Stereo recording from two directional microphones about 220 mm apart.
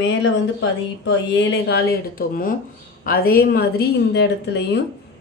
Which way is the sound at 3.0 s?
40° left (ahead or behind).